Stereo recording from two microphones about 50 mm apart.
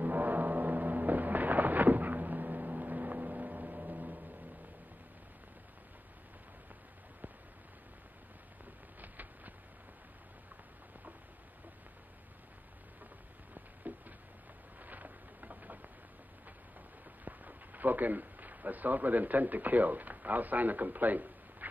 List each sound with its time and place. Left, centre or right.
0.0 s vehicle: right
9.0 s train: right
13.6 s a sound: right
17.2 s a man's voice: right